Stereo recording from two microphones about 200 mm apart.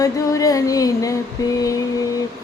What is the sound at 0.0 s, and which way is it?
Music, 15° left (ahead or behind).